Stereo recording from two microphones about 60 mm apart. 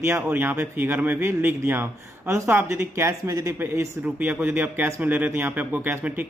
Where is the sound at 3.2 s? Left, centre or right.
Right.